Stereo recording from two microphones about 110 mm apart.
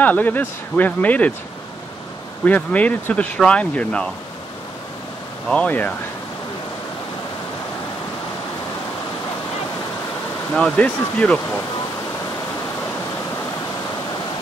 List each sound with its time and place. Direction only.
0.0 s speech: 15° left (ahead or behind)
2.4 s speech: 15° left (ahead or behind)
5.5 s speech: 15° left (ahead or behind)
10.5 s speech: 10° left (ahead or behind)